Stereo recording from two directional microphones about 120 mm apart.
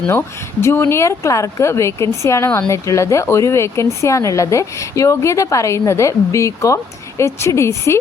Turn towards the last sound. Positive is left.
turn(degrees=25)  # may be behind; listen again after turning